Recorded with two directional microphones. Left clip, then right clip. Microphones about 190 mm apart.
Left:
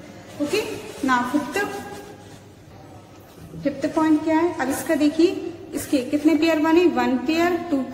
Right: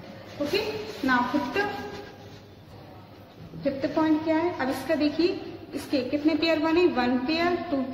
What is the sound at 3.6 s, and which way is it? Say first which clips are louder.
A woman's voice: left 4 dB; 20° left (ahead or behind).